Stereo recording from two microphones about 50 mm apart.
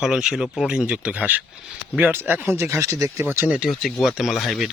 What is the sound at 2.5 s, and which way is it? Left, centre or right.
Speech, right.